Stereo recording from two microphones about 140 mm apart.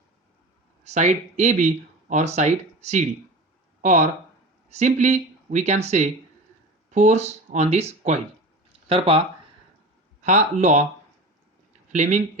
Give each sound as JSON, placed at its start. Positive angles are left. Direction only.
{"t": 0.9, "sound": "speech", "side_deg": -55}
{"t": 10.2, "sound": "speech", "side_deg": -60}
{"t": 11.9, "sound": "speech", "side_deg": -60}